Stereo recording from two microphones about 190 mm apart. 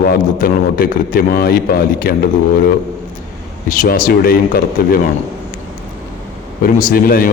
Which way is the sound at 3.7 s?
45° left (ahead or behind).